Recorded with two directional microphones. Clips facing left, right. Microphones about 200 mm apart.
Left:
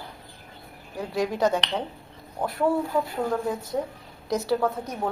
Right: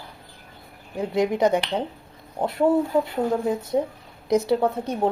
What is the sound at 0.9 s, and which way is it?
Speech, 20° right (ahead or behind).